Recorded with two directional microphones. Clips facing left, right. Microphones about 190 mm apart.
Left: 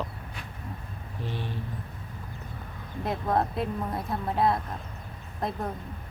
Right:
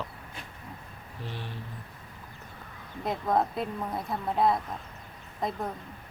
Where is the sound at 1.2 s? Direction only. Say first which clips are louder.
Left 4 dB; 15° left (ahead or behind).